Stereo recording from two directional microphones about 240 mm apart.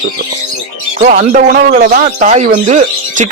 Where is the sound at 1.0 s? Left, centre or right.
Right.